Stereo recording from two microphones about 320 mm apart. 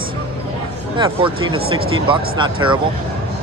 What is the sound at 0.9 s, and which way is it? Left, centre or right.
Speech, centre.